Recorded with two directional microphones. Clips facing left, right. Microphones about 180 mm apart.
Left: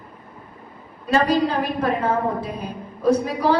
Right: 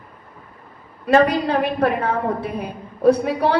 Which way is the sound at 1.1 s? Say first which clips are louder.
Right 3 dB; 60° right (ahead or behind).